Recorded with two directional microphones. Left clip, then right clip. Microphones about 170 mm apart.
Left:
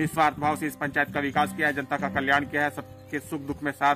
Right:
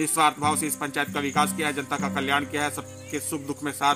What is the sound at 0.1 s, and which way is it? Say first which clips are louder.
Speech: right 2 dB; 15° left (ahead or behind).